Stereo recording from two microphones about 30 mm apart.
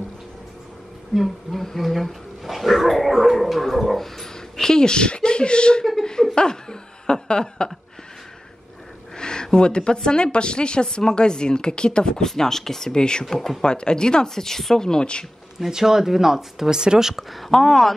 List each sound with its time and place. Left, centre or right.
1.1 s a sound: centre
2.4 s speech: centre
4.6 s speech: left
9.1 s a sound: left
10.0 s a woman's voice: left
12.3 s speech: centre
12.9 s speech: left
14.3 s speech: centre
15.7 s speech: centre
16.7 s speech: right
17.1 s a sound: centre
17.5 s speech: centre